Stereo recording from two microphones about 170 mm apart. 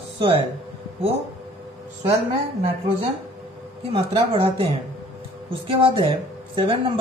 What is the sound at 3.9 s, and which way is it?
Speech, 35° right (ahead or behind).